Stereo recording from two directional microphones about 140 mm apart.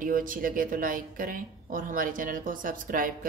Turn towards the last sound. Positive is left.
turn(degrees=-85)